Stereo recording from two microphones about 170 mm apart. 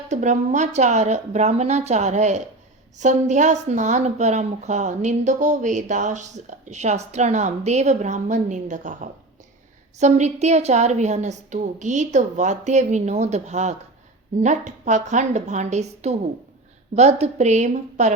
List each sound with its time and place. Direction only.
0.1 s a woman's voice: 45° right (ahead or behind)